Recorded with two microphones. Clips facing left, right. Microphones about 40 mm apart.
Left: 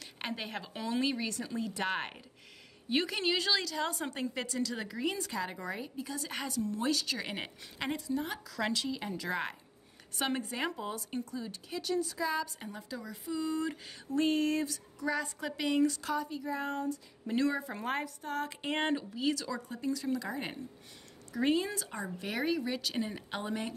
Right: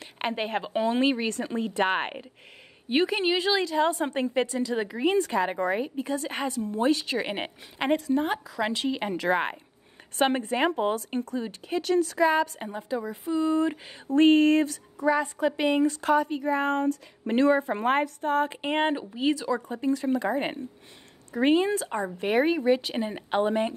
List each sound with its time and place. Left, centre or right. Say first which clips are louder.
0.0 s a woman's voice: right 9 dB; right
8.5 s speech: right 5 dB; centre
8.7 s speech: right 8 dB; right
12.6 s a woman's voice: right 11 dB; right
17.4 s a woman's voice: right 10 dB; right